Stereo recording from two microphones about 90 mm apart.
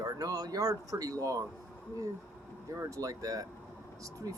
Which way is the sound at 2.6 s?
35° right (ahead or behind).